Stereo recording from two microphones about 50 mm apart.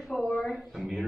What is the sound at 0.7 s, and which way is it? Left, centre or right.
Speech, centre.